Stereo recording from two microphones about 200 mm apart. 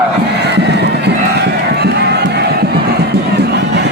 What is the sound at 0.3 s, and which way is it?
Crowd, 55° right (ahead or behind).